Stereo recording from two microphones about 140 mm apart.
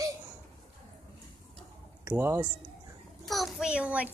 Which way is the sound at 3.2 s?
Centre (ahead or behind).